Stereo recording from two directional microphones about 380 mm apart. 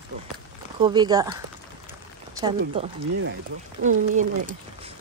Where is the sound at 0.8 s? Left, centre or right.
Centre.